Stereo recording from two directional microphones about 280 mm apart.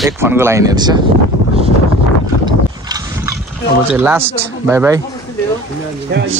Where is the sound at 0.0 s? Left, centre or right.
Centre.